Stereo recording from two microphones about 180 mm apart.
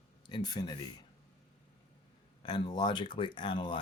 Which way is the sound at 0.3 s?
25° left (ahead or behind).